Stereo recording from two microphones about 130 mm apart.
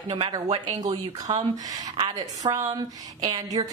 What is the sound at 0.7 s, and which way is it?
Speech, 30° right (ahead or behind).